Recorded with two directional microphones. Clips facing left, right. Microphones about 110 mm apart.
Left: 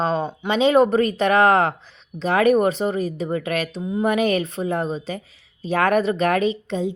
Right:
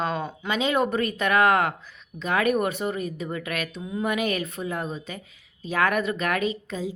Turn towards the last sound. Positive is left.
turn(degrees=30)  # may be behind; listen again after turning